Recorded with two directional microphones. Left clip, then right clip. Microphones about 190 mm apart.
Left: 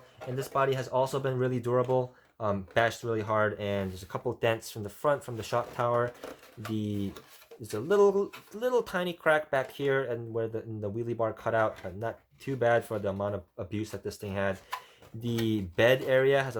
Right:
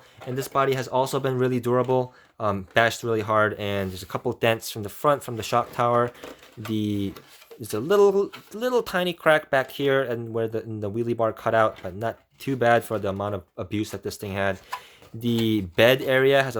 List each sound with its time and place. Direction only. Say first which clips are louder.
0.3 s speech: right 5 dB; 50° right (ahead or behind)